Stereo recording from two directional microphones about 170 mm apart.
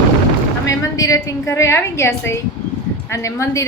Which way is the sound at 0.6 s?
20° left (ahead or behind).